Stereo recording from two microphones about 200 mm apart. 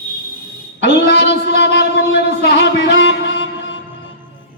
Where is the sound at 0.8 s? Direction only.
60° left (ahead or behind).